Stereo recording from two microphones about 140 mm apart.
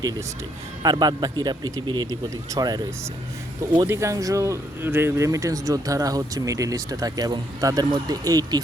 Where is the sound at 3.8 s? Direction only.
20° right (ahead or behind).